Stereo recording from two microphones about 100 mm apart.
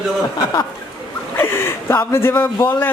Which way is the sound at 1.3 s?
20° left (ahead or behind).